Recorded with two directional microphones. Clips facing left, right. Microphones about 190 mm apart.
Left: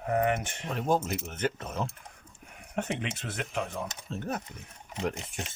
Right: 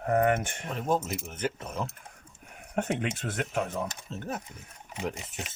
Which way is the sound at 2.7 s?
50° right (ahead or behind).